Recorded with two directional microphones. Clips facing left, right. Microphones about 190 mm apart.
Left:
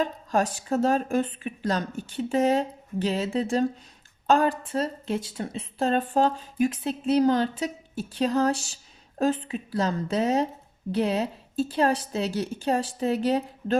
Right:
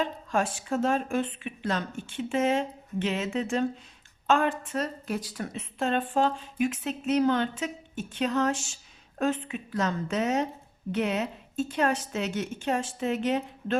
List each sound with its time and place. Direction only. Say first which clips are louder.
0.0 s a woman's voice: left 3 dB; 40° left (ahead or behind)